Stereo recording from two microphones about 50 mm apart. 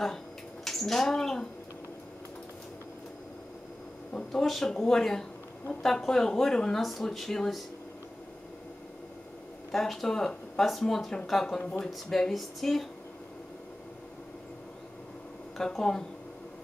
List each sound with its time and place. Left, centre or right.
0.7 s speech: centre
4.3 s speech: centre
9.7 s speech: centre
15.5 s speech: centre